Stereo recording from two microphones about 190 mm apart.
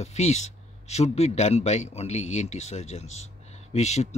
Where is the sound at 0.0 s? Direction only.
35° left (ahead or behind).